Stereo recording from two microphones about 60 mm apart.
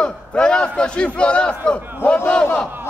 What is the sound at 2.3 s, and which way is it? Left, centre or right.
Battle cry, centre.